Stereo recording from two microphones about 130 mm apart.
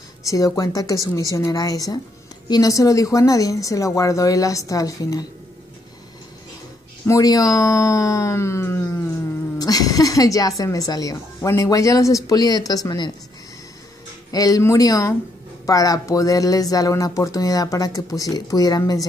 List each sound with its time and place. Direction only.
0.2 s speech: 25° left (ahead or behind)
7.1 s speech: 30° left (ahead or behind)
14.3 s speech: 25° left (ahead or behind)